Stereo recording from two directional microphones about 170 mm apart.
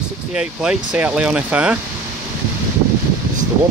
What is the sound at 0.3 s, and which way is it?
Speech, 5° right (ahead or behind).